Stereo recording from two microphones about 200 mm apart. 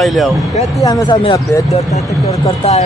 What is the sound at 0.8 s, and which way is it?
Speech, 20° left (ahead or behind).